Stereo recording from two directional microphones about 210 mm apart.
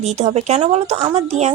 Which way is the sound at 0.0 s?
30° right (ahead or behind).